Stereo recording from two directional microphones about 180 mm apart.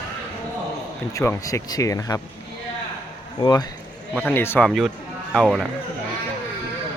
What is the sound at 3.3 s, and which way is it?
Speech, 25° left (ahead or behind).